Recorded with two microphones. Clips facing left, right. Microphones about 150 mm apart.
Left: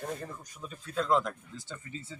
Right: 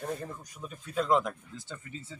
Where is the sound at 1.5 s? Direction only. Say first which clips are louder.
Even; 10° left (ahead or behind).